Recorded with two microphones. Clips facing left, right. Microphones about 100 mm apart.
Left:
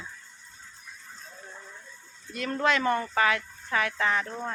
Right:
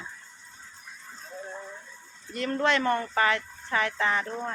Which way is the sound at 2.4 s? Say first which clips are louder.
Right 1 dB; 10° left (ahead or behind).